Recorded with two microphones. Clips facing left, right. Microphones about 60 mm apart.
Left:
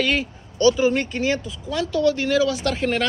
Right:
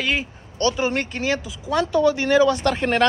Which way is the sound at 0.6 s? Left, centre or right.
Right.